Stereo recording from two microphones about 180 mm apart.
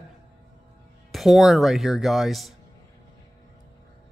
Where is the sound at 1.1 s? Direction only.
Centre (ahead or behind).